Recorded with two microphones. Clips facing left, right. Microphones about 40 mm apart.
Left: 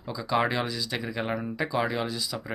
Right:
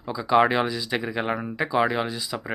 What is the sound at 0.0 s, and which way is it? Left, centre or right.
Speech, centre.